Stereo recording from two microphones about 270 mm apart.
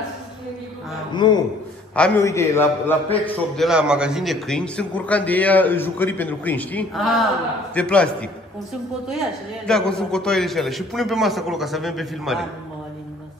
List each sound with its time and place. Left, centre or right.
1.1 s a man's voice: centre